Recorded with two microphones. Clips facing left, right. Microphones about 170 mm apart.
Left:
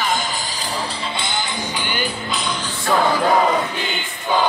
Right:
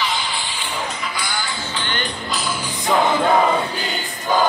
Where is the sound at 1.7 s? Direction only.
10° left (ahead or behind).